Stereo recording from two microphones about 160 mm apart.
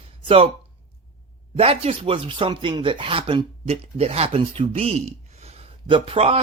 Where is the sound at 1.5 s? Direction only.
40° right (ahead or behind).